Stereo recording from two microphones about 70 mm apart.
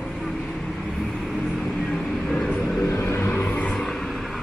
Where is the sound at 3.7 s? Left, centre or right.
Centre.